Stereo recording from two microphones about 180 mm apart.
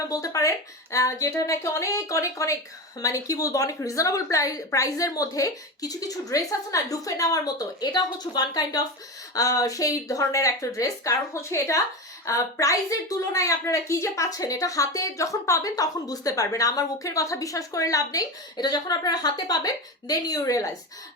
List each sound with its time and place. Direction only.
0.1 s a woman's voice: 20° left (ahead or behind)